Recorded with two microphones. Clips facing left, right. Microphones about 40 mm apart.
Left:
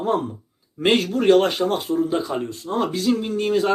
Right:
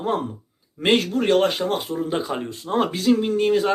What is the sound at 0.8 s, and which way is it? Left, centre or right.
A man's voice, centre.